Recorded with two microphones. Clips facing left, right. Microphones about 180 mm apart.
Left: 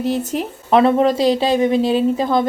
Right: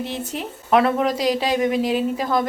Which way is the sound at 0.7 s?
30° left (ahead or behind).